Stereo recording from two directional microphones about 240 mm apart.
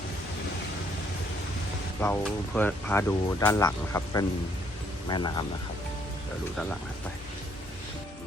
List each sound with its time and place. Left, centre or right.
2.0 s speech: centre